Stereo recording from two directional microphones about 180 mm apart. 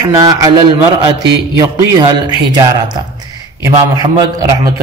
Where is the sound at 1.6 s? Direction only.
20° right (ahead or behind).